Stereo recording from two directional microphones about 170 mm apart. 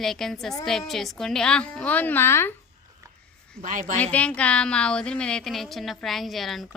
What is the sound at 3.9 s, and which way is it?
Speech, 10° left (ahead or behind).